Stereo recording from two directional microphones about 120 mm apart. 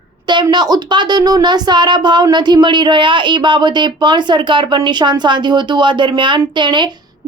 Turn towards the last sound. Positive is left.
turn(degrees=-40)  # may be behind; listen again after turning